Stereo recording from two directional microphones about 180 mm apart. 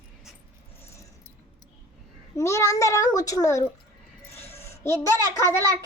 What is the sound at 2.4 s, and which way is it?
A child's voice, 15° left (ahead or behind).